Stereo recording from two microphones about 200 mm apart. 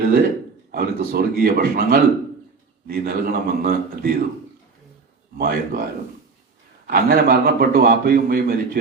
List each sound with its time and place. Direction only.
0.7 s a man's voice: 50° right (ahead or behind)
5.4 s a man's voice: 45° right (ahead or behind)
6.8 s a man's voice: 50° right (ahead or behind)